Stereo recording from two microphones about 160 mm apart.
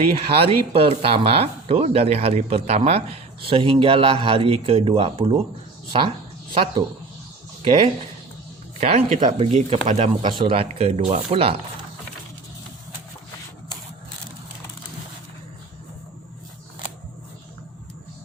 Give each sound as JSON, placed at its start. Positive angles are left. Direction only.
{"t": 0.3, "sound": "speech", "side_deg": -35}
{"t": 8.8, "sound": "speech", "side_deg": -40}